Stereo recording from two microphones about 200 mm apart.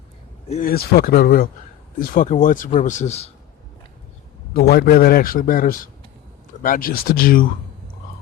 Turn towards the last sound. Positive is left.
turn(degrees=45)  # may be behind; listen again after turning